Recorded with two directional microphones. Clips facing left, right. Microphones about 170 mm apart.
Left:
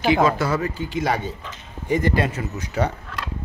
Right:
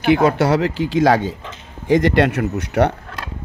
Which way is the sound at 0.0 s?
60° right (ahead or behind).